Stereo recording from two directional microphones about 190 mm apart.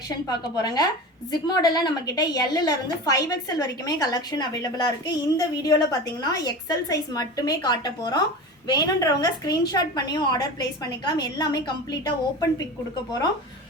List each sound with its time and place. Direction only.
0.3 s a woman's voice: 20° left (ahead or behind)